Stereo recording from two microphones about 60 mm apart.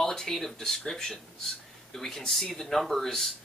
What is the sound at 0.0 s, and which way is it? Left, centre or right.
Speech, centre.